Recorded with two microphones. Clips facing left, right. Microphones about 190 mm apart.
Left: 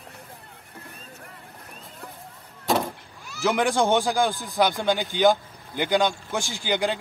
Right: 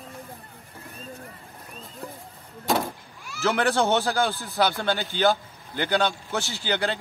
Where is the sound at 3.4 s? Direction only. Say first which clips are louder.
Left 1 dB; 10° left (ahead or behind).